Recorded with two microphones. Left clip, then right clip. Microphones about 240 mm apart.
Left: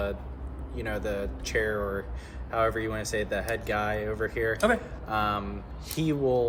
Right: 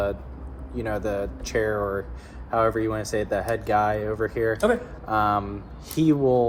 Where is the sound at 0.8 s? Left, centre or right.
Centre.